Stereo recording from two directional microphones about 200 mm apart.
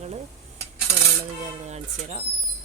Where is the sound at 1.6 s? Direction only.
35° right (ahead or behind).